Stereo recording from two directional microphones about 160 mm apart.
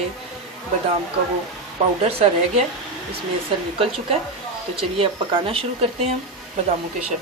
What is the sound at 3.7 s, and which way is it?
Speech, 35° right (ahead or behind).